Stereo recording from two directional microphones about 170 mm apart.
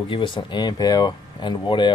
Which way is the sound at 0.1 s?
30° left (ahead or behind).